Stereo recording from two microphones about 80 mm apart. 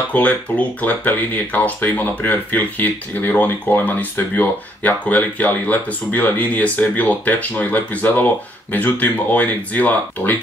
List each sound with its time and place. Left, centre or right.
0.1 s speech: centre